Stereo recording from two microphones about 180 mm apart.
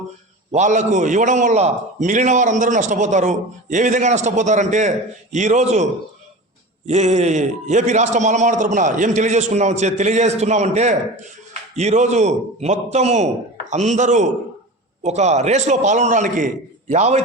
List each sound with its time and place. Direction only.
0.5 s a man's voice: 40° right (ahead or behind)